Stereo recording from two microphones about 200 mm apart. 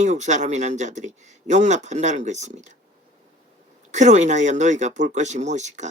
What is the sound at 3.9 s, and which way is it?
Speech, 35° right (ahead or behind).